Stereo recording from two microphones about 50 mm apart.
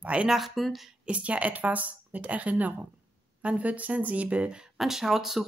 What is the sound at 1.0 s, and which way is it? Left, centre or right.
Speech, right.